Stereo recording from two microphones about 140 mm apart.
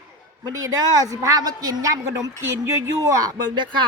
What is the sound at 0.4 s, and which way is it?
A woman's voice, 25° right (ahead or behind).